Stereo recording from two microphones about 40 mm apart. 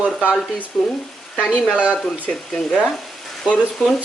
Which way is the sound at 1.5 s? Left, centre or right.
Right.